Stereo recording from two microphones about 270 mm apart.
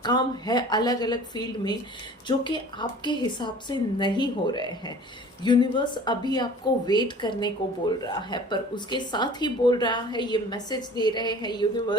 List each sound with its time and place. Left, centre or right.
0.0 s speech: centre